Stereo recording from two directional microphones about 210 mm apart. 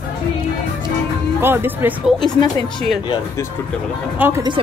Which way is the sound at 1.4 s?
10° right (ahead or behind).